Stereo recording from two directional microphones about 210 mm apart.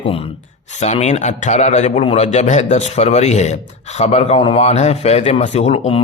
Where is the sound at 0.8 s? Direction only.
35° left (ahead or behind).